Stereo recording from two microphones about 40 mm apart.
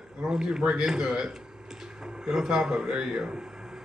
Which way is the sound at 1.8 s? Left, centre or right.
Centre.